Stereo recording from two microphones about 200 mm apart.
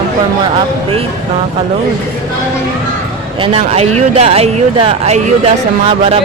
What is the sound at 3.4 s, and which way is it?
Speech, 30° right (ahead or behind).